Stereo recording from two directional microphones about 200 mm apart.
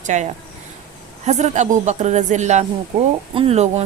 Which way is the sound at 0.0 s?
35° right (ahead or behind).